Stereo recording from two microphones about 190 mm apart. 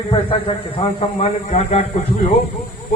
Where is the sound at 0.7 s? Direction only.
30° left (ahead or behind).